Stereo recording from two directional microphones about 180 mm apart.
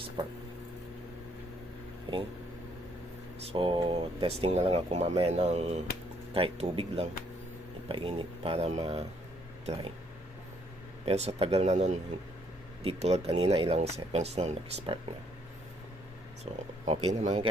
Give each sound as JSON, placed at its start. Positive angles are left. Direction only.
{"t": 2.1, "sound": "speech", "side_deg": -25}
{"t": 3.5, "sound": "speech", "side_deg": -30}
{"t": 11.0, "sound": "speech", "side_deg": -35}
{"t": 16.5, "sound": "speech", "side_deg": -30}